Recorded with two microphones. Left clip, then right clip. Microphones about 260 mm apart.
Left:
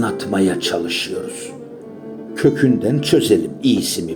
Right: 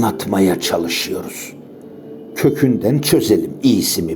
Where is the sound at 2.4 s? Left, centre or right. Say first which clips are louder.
Even; right.